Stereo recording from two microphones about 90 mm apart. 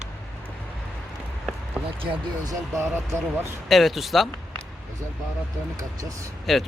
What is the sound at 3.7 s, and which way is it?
Speech, centre (ahead or behind).